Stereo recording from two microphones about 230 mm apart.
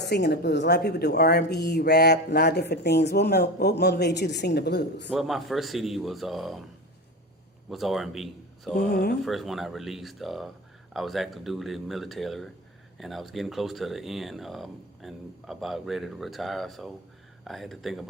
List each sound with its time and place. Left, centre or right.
0.0 s speech: left
5.0 s speech: centre
7.7 s speech: centre
8.9 s speech: left
9.2 s speech: centre